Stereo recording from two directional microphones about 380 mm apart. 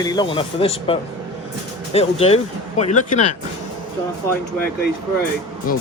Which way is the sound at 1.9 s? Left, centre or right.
Centre.